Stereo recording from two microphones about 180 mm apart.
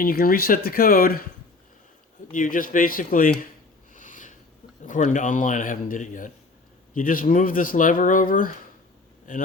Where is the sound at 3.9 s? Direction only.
45° left (ahead or behind).